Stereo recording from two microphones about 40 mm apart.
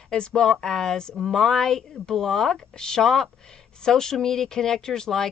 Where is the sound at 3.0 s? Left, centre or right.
Centre.